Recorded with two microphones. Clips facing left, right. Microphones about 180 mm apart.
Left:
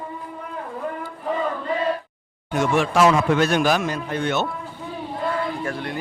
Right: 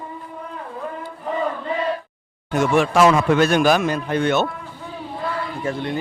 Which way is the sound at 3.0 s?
55° right (ahead or behind).